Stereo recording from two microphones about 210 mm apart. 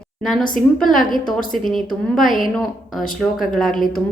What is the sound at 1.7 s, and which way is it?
A woman's voice, centre (ahead or behind).